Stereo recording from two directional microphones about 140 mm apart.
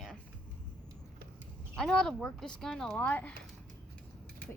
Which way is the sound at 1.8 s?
5° left (ahead or behind).